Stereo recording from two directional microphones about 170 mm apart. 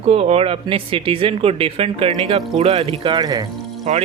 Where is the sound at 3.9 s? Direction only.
40° right (ahead or behind).